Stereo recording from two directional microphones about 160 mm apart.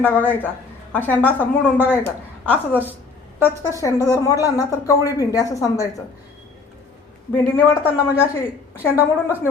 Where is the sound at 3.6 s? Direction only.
20° left (ahead or behind).